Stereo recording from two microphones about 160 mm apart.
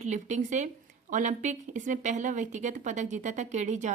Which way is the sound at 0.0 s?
45° right (ahead or behind).